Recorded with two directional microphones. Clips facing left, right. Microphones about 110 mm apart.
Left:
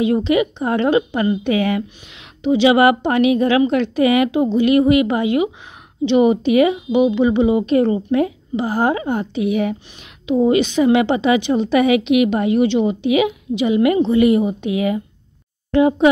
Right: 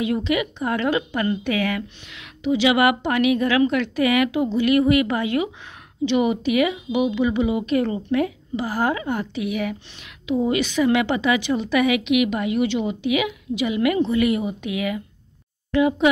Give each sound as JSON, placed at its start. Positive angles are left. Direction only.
{"t": 0.0, "sound": "a woman's voice", "side_deg": 30}
{"t": 6.0, "sound": "a woman's voice", "side_deg": 30}